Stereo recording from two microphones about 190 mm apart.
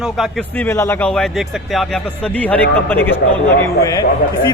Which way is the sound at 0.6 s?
10° left (ahead or behind).